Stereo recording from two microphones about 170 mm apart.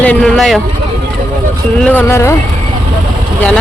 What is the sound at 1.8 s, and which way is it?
Speech, 10° left (ahead or behind).